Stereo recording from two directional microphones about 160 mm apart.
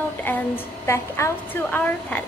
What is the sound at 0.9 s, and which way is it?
A woman's voice, 15° left (ahead or behind).